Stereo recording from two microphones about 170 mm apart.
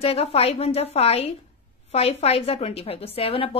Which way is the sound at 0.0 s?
35° left (ahead or behind).